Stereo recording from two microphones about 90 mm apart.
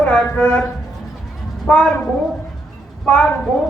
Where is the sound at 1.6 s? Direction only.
5° left (ahead or behind).